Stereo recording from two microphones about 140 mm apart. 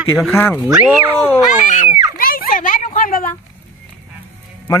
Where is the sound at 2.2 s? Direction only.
90° left; by 3.3 s 70° left (ahead or behind).